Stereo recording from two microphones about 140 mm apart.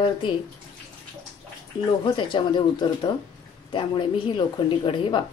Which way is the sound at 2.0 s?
35° left (ahead or behind).